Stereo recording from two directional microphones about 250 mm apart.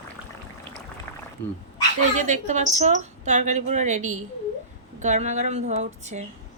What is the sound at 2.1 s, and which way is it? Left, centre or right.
Speech, right.